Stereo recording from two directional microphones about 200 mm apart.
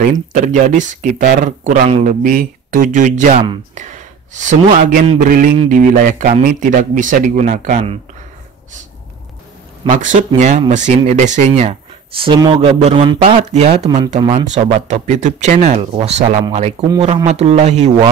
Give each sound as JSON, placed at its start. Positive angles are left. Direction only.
{"t": 0.1, "sound": "a man's voice", "side_deg": -40}
{"t": 9.8, "sound": "a man's voice", "side_deg": -40}